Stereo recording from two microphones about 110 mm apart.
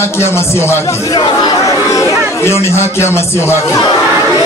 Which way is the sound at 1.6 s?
30° left (ahead or behind).